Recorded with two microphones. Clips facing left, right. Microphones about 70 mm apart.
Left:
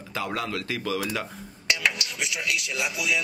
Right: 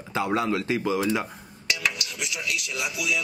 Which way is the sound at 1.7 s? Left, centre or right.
Left.